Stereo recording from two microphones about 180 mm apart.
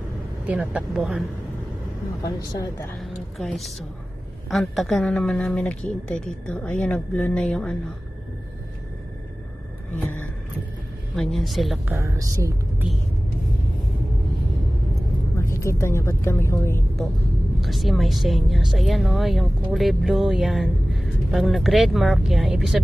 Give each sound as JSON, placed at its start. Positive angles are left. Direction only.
{"t": 0.5, "sound": "a woman's voice", "side_deg": -5}
{"t": 2.2, "sound": "a woman's voice", "side_deg": 20}
{"t": 3.0, "sound": "a woman's voice", "side_deg": 0}
{"t": 11.1, "sound": "speech", "side_deg": 0}
{"t": 15.3, "sound": "speech", "side_deg": 15}
{"t": 17.6, "sound": "a woman's voice", "side_deg": 0}